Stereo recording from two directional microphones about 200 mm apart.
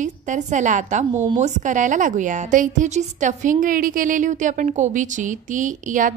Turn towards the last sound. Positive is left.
turn(degrees=-40)  # may be behind; listen again after turning